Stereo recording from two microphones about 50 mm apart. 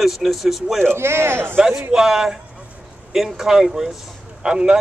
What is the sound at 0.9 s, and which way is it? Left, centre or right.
Speech, right.